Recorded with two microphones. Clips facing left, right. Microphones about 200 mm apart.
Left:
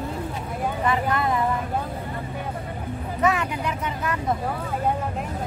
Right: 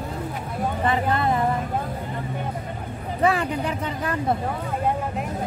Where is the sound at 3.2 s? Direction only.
30° right (ahead or behind).